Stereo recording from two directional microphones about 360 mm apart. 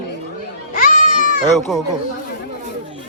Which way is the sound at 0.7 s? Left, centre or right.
Left.